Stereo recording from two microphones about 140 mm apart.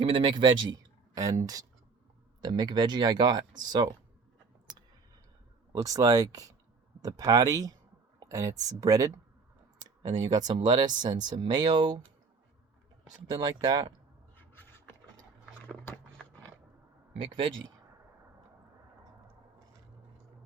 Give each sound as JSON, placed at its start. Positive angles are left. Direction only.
{"t": 0.0, "sound": "speech", "side_deg": -35}
{"t": 5.7, "sound": "speech", "side_deg": -25}
{"t": 13.3, "sound": "speech", "side_deg": -30}
{"t": 14.3, "sound": "a sound", "side_deg": 15}
{"t": 15.7, "sound": "biting", "side_deg": 10}